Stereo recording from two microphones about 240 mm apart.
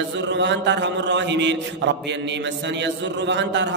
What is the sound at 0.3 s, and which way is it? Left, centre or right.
A man's voice, right.